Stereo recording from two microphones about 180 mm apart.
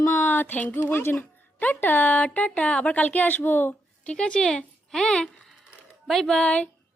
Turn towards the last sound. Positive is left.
turn(degrees=5)  # may be behind; listen again after turning